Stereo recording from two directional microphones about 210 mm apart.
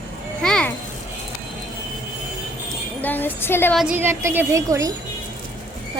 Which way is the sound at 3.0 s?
10° left (ahead or behind).